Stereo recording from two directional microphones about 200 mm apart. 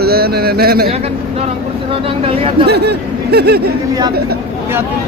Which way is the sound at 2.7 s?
55° right (ahead or behind).